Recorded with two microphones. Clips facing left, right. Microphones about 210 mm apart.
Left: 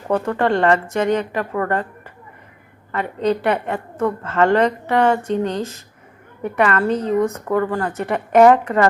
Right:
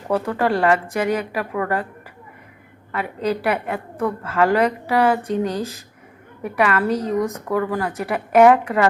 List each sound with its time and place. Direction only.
0.3 s a woman's voice: 5° right (ahead or behind)
2.9 s a woman's voice: 5° right (ahead or behind)
6.8 s speech: 30° left (ahead or behind)
7.2 s a woman's voice: 15° right (ahead or behind)